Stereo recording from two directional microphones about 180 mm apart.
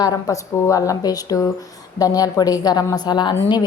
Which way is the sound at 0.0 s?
20° left (ahead or behind).